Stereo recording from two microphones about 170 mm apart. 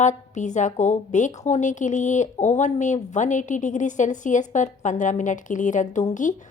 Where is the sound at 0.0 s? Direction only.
45° left (ahead or behind).